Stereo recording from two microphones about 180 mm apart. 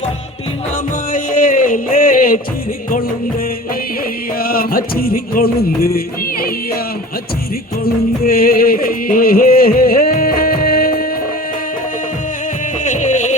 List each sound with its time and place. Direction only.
1.1 s a sound: 50° left (ahead or behind)
4.4 s music: 55° left (ahead or behind)
7.9 s music: 55° left (ahead or behind)
12.8 s music: 45° left (ahead or behind)